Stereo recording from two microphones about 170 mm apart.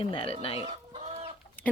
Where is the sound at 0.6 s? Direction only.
40° right (ahead or behind).